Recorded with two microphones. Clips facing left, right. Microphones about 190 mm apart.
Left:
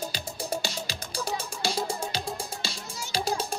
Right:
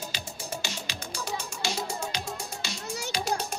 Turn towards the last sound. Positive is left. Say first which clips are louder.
# left 1 dB
turn(degrees=30)  # may be behind; listen again after turning